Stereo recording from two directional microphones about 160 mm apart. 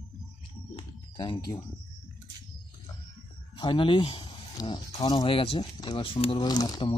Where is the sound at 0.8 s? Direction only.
25° left (ahead or behind).